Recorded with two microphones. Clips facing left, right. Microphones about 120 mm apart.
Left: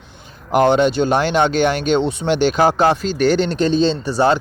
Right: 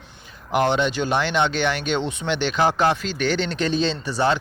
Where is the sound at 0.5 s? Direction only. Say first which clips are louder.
Left 6 dB; 40° left (ahead or behind).